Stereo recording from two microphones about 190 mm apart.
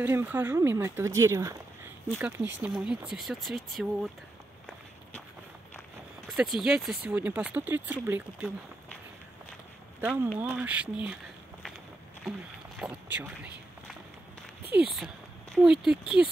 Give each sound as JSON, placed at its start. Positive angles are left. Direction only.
{"t": 0.0, "sound": "speech", "side_deg": -10}
{"t": 6.2, "sound": "speech", "side_deg": 0}
{"t": 10.0, "sound": "speech", "side_deg": -10}
{"t": 12.3, "sound": "speech", "side_deg": -5}
{"t": 15.5, "sound": "speech", "side_deg": -5}